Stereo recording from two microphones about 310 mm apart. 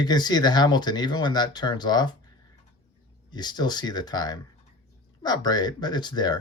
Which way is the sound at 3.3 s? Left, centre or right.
Centre.